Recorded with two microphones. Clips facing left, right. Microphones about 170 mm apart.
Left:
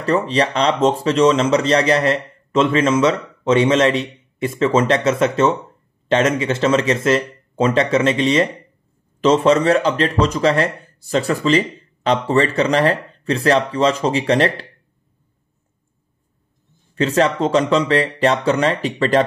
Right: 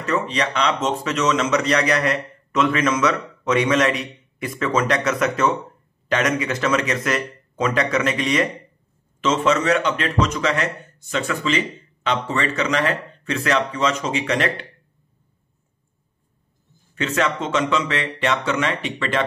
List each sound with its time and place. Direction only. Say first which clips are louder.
0.0 s speech: left 5 dB; 35° left (ahead or behind)
16.9 s speech: left 6 dB; 35° left (ahead or behind)